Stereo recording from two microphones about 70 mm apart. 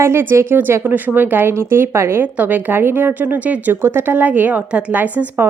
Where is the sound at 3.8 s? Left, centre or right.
Right.